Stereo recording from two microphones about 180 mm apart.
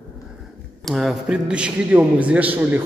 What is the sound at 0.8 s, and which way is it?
A man's voice, centre (ahead or behind).